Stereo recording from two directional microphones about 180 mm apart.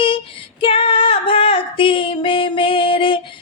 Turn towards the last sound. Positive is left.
turn(degrees=30)  # may be behind; listen again after turning